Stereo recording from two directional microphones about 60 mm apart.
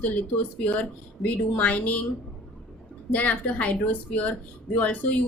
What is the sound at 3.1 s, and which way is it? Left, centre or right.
Speech, left.